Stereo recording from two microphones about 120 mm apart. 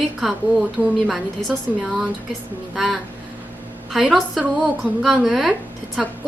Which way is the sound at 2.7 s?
Centre (ahead or behind).